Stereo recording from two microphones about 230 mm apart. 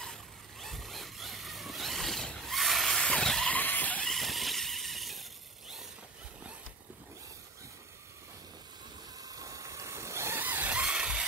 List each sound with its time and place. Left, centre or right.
0.0 s vehicle: centre
9.2 s vehicle: centre